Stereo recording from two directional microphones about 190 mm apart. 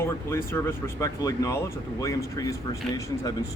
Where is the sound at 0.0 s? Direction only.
10° left (ahead or behind).